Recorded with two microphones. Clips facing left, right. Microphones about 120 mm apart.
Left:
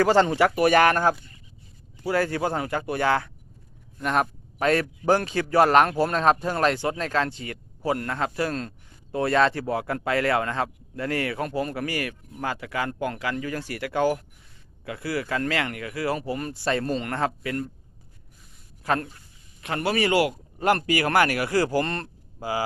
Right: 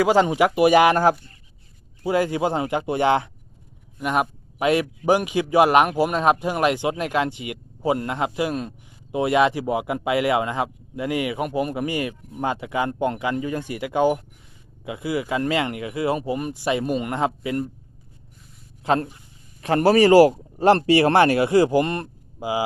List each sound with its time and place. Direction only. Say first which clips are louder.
0.0 s speech: right 2 dB; 10° right (ahead or behind)
18.8 s speech: right 4 dB; 25° right (ahead or behind)
19.6 s speech: right 9 dB; 35° right (ahead or behind); by 22.6 s 15° right (ahead or behind)